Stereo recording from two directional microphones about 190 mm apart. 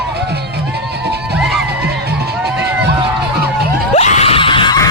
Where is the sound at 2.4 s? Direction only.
65° right (ahead or behind).